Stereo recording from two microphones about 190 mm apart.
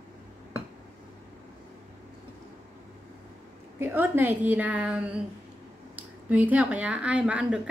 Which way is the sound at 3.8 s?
10° right (ahead or behind).